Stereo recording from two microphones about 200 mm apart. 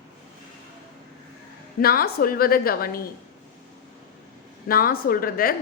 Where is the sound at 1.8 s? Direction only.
50° left (ahead or behind).